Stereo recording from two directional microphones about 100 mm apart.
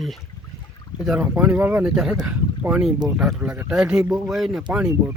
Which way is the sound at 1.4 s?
15° right (ahead or behind).